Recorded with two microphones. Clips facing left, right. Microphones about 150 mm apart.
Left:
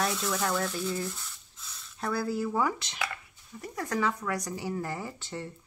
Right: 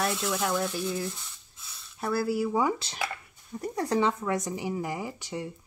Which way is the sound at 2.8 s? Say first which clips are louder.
Right 2 dB; 30° right (ahead or behind).